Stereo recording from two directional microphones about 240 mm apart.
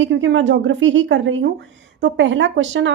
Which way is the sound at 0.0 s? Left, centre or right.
Right.